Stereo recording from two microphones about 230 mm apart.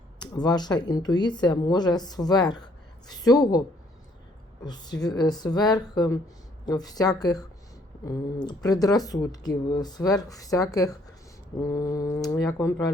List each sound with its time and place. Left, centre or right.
0.2 s speech: centre
4.6 s speech: centre